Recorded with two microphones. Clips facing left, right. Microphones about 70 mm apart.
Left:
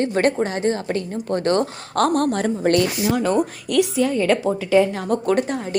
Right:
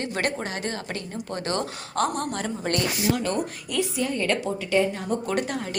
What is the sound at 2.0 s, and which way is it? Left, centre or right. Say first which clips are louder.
Speech: left 7 dB; left.